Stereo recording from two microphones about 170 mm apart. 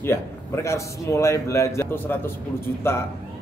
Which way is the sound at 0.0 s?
15° left (ahead or behind).